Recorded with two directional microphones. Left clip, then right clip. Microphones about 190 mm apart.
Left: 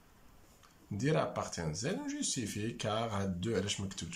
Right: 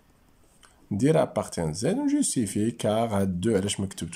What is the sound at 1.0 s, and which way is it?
Speech, 40° right (ahead or behind).